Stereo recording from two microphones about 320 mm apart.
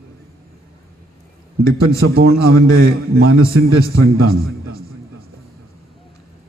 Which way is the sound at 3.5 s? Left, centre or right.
Right.